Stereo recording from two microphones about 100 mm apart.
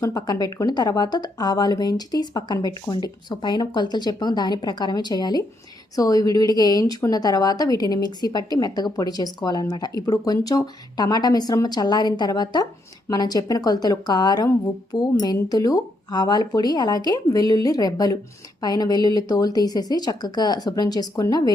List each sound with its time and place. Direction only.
0.0 s a woman's voice: 40° left (ahead or behind)